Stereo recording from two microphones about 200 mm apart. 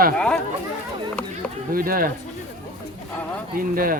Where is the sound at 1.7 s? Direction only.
45° right (ahead or behind).